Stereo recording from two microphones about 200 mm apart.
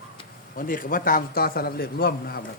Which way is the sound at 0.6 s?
45° left (ahead or behind).